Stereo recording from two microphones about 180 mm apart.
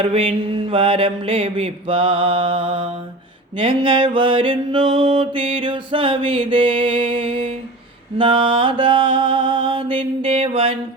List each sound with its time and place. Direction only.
0.0 s mantra: 35° right (ahead or behind)